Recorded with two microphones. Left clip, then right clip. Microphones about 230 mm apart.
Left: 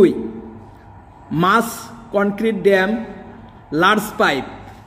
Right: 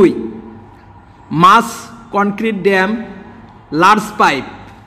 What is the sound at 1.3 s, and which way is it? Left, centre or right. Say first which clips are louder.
Speech: right 8 dB; centre.